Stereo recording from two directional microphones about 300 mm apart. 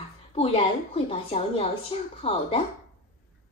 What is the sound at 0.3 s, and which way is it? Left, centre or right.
Speech, centre.